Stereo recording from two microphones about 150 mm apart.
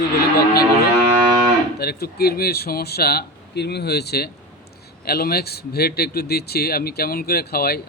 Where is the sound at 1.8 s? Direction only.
90° left.